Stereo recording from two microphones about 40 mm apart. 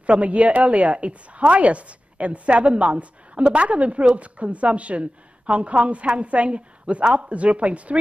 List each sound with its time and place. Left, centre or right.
0.0 s a woman's voice: right